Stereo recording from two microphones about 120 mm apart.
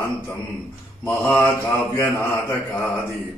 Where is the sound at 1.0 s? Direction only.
20° left (ahead or behind).